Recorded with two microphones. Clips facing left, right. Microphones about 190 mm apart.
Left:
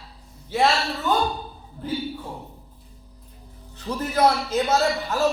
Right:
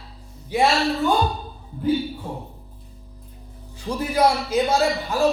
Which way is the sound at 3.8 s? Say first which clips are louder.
Right 1 dB; 10° right (ahead or behind).